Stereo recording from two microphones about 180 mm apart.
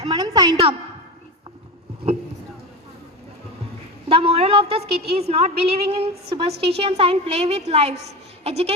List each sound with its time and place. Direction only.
0.0 s a woman's voice: 25° right (ahead or behind)
4.1 s a woman's voice: 30° right (ahead or behind)